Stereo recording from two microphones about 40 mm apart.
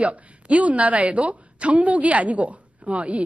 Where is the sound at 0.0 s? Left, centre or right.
Right.